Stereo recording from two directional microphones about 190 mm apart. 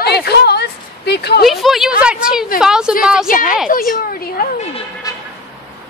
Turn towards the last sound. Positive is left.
turn(degrees=20)  # may be behind; listen again after turning